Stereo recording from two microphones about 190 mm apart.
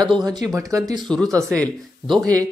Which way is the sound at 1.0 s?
Centre (ahead or behind).